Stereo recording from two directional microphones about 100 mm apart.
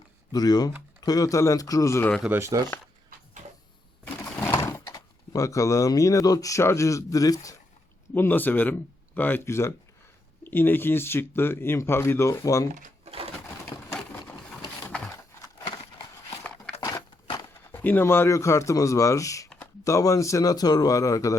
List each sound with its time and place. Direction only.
0.3 s speech: 40° left (ahead or behind)
2.3 s speech: 25° right (ahead or behind)
4.2 s sewing machine: 25° left (ahead or behind)
4.8 s speech: 40° left (ahead or behind)
8.1 s speech: 20° left (ahead or behind)
15.1 s a sound: 35° left (ahead or behind)
17.7 s speech: 20° left (ahead or behind)